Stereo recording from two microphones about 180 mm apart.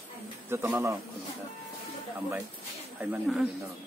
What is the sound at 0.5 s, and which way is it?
Speech, 15° right (ahead or behind).